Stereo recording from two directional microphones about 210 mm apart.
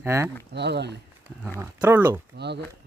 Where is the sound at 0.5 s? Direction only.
55° right (ahead or behind).